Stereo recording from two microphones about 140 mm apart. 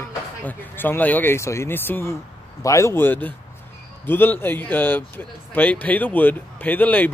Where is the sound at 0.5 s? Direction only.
15° left (ahead or behind).